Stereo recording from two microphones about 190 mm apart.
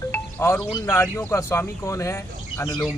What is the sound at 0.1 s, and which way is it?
Speech, 10° left (ahead or behind).